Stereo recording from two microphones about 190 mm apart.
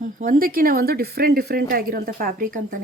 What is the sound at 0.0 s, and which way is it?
Speech, 45° right (ahead or behind).